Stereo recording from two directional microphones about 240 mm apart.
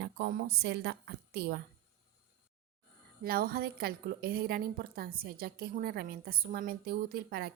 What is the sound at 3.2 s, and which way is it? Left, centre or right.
A woman's voice, right.